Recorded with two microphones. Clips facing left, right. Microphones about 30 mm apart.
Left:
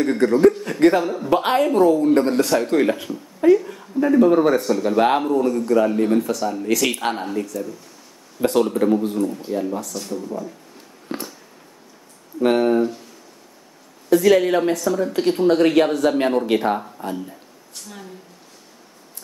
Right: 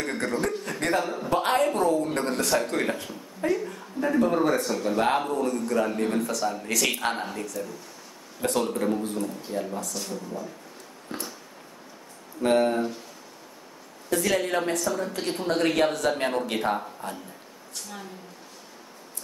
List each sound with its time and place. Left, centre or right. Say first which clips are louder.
0.0 s speech: left 12 dB; centre
1.3 s speech: left 6 dB; centre
2.1 s speech: left 8 dB; centre
5.6 s speech: left 8 dB; centre
8.4 s speech: left 8 dB; centre
11.1 s a sound: left 6 dB; left
12.5 s speech: left 5 dB; centre
14.1 s speech: left 10 dB; centre
14.8 s speech: left 7 dB; centre